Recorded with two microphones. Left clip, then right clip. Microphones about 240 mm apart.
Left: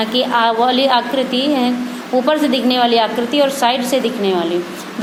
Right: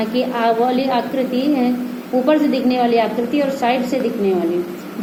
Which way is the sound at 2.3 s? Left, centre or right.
Left.